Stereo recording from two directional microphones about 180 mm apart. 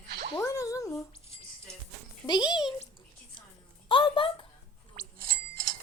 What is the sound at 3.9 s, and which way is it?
Speech, 30° left (ahead or behind).